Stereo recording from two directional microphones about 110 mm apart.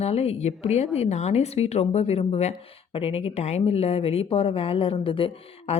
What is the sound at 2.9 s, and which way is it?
Speech, 60° left (ahead or behind).